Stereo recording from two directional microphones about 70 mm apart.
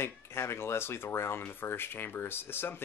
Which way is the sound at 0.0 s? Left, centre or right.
Left.